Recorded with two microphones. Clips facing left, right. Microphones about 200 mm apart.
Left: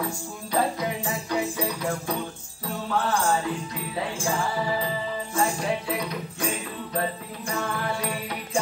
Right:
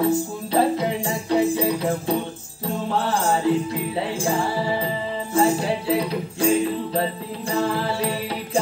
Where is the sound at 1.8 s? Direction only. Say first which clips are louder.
Right 6 dB; 25° right (ahead or behind).